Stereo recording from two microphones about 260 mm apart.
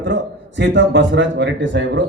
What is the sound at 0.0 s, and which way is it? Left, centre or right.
A man's voice, right.